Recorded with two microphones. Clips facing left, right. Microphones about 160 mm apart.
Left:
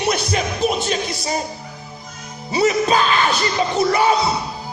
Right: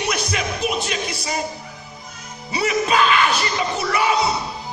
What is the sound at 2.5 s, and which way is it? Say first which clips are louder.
Speech: left 4 dB; 35° left (ahead or behind).